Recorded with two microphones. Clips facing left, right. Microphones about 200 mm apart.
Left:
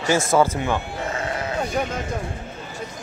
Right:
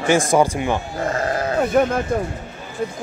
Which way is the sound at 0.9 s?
50° right (ahead or behind).